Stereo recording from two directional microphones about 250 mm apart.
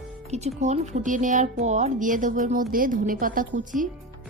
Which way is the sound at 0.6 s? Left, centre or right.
Right.